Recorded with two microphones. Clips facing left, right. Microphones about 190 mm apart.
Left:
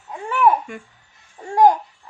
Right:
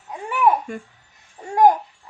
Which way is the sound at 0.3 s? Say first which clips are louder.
Left 1 dB; 15° right (ahead or behind).